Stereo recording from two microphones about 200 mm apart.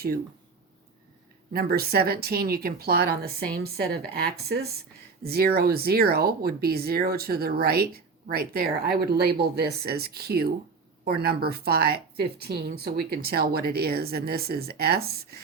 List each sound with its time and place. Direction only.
1.5 s speech: 50° right (ahead or behind)